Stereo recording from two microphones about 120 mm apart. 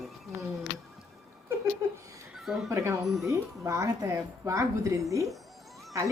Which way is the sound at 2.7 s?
25° right (ahead or behind).